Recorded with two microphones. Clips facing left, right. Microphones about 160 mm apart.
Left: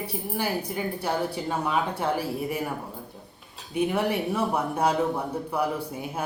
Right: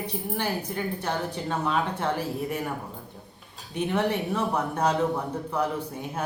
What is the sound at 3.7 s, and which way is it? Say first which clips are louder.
A woman's voice: left 1 dB; 10° left (ahead or behind).